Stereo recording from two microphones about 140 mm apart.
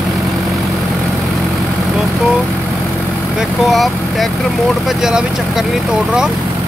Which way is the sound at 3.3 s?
Centre (ahead or behind).